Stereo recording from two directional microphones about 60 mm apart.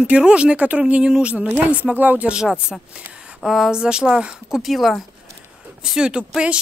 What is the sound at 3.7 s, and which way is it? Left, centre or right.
A woman's voice, centre.